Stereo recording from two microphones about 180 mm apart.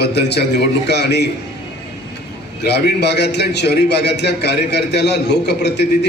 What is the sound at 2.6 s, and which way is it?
A man's voice, 65° left (ahead or behind).